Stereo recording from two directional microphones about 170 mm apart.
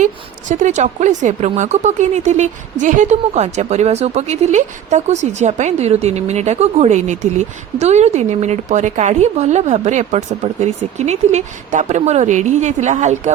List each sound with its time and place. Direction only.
0.0 s a woman's voice: 45° right (ahead or behind)